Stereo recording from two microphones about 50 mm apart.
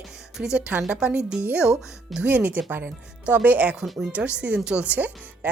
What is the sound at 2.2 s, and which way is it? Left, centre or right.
A woman's voice, right.